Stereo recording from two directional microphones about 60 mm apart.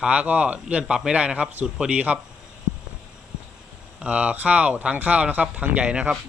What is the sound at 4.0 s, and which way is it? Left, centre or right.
Speech, right.